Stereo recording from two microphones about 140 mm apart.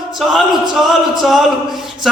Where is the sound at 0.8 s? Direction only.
Centre (ahead or behind).